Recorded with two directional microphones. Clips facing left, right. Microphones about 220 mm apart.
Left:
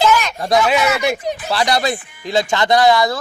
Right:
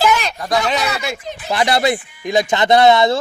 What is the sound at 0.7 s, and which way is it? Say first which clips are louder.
Speech: left 5 dB; 10° left (ahead or behind).